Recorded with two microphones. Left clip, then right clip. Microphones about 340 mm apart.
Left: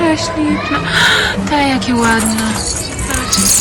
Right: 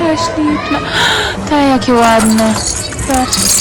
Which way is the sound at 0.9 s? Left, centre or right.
Centre.